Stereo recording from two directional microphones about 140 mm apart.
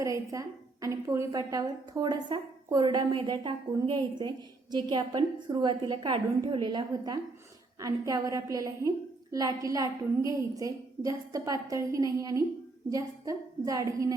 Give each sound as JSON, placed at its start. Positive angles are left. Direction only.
{"t": 0.0, "sound": "a woman's voice", "side_deg": -25}